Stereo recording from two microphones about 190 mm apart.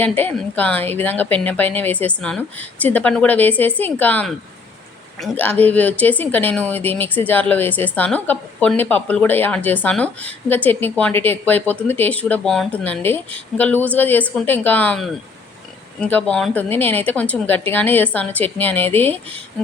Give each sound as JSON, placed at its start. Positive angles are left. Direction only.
{"t": 0.0, "sound": "speech", "side_deg": 10}